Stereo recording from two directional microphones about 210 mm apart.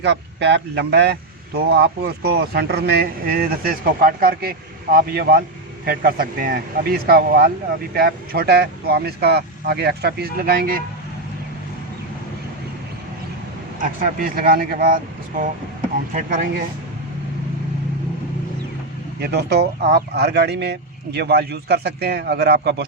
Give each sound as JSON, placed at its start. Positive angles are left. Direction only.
{"t": 0.0, "sound": "speech", "side_deg": -55}
{"t": 13.8, "sound": "speech", "side_deg": -40}
{"t": 19.2, "sound": "speech", "side_deg": -50}